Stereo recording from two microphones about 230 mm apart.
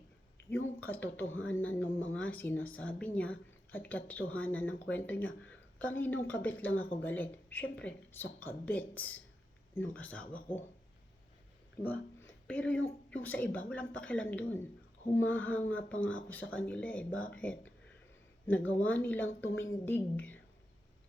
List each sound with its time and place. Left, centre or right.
0.8 s speech: centre
1.3 s a woman's voice: left
1.5 s speech: centre
11.8 s a sound: centre
13.2 s speech: centre
19.4 s a woman's voice: left
19.8 s speech: centre